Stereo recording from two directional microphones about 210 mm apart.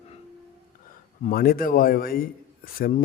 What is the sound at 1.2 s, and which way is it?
Speech, 45° left (ahead or behind).